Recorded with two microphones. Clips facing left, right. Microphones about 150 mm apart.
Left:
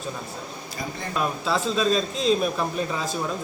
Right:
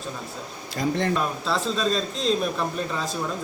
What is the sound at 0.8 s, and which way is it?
Speech, 80° right.